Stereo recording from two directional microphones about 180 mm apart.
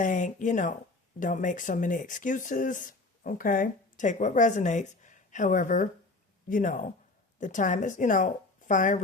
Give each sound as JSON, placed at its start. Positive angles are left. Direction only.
{"t": 0.0, "sound": "a woman's voice", "side_deg": 45}